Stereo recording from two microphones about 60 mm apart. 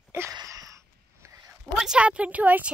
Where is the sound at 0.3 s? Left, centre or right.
Right.